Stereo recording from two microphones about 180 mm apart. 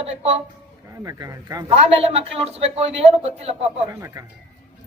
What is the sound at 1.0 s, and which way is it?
Speech, 20° right (ahead or behind).